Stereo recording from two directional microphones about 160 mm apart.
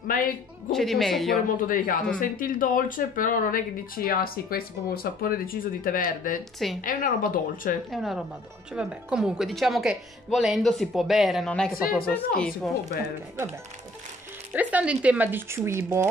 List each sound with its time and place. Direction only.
0.1 s speech: 60° left (ahead or behind)
0.7 s speech: centre (ahead or behind)
1.7 s speech: 55° left (ahead or behind)
7.9 s speech: centre (ahead or behind)
11.7 s speech: 65° left (ahead or behind)
12.4 s speech: 5° left (ahead or behind)
14.5 s speech: 10° right (ahead or behind)